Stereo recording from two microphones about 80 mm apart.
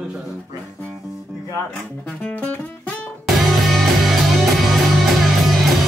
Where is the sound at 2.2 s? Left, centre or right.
Left.